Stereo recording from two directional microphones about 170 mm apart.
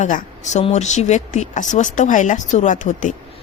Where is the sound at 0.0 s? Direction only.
45° left (ahead or behind).